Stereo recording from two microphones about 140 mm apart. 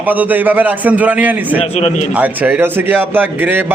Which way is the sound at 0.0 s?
10° right (ahead or behind).